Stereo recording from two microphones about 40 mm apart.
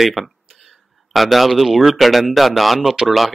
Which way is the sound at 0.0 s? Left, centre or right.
Centre.